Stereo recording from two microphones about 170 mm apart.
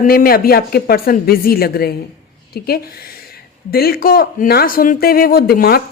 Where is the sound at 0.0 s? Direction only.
55° left (ahead or behind).